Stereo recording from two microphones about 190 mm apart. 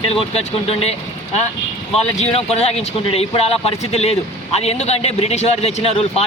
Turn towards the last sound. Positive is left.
turn(degrees=35)  # may be behind; listen again after turning